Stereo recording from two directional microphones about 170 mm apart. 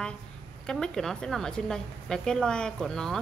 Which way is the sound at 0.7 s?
Centre (ahead or behind).